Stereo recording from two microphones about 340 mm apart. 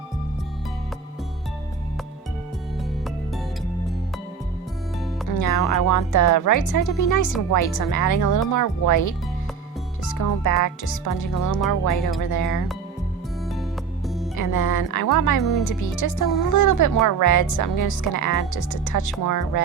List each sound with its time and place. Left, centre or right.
5.3 s a woman's voice: left
14.3 s a woman's voice: left